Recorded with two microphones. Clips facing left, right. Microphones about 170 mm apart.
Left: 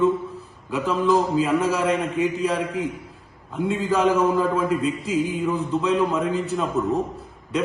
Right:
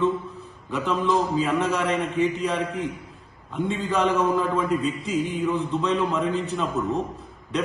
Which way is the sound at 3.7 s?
5° left (ahead or behind).